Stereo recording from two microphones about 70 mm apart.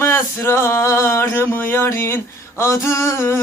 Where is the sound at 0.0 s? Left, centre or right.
Left.